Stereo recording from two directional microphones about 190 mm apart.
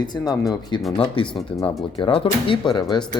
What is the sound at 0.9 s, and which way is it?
A man's voice, 30° left (ahead or behind).